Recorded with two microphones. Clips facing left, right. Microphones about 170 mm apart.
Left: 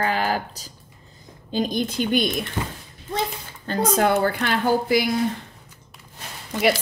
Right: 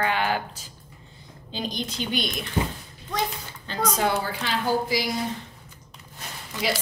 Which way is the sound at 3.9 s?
50° left (ahead or behind).